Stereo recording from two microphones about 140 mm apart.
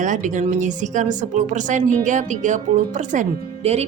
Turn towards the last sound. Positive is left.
turn(degrees=-50)  # may be behind; listen again after turning